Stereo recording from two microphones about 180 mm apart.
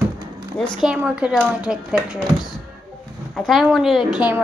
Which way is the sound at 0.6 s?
Centre (ahead or behind).